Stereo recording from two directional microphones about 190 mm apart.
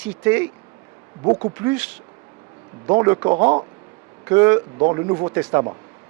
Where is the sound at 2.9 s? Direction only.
20° right (ahead or behind).